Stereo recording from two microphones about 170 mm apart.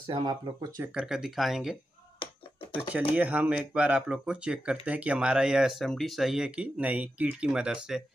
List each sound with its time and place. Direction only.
0.0 s speech: 25° right (ahead or behind)
0.9 s speech: 5° right (ahead or behind)
3.2 s speech: 10° right (ahead or behind)